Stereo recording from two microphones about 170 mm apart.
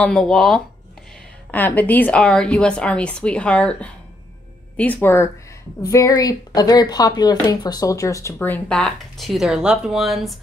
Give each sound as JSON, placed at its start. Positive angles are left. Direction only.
{"t": 0.0, "sound": "speech", "side_deg": 5}